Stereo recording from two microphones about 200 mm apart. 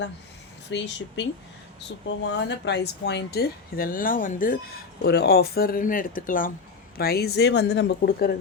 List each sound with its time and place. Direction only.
0.7 s speech: 65° left (ahead or behind)
2.0 s speech: 60° left (ahead or behind); by 4.5 s 45° left (ahead or behind)
5.0 s speech: 55° left (ahead or behind)